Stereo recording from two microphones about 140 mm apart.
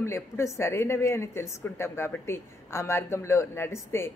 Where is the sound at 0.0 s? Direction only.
20° left (ahead or behind).